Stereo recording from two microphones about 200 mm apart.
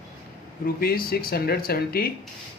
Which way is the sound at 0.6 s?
50° left (ahead or behind).